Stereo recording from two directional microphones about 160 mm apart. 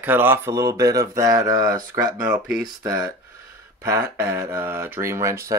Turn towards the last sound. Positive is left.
turn(degrees=-20)  # may be behind; listen again after turning